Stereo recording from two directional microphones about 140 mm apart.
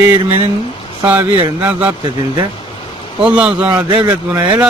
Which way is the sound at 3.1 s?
5° right (ahead or behind).